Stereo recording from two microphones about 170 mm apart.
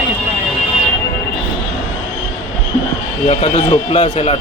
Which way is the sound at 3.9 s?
40° left (ahead or behind).